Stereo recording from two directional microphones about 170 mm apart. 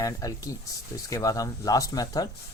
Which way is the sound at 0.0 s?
20° left (ahead or behind).